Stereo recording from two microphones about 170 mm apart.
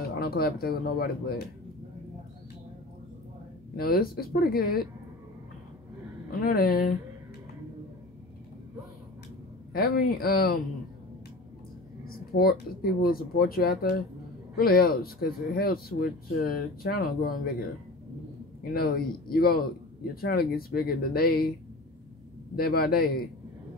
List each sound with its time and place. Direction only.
0.2 s speech: 65° left (ahead or behind)
3.7 s speech: 65° left (ahead or behind)
6.4 s speech: 60° left (ahead or behind)
9.7 s speech: 60° left (ahead or behind)
12.3 s speech: 65° left (ahead or behind)
18.6 s speech: 60° left (ahead or behind)
22.6 s speech: 65° left (ahead or behind)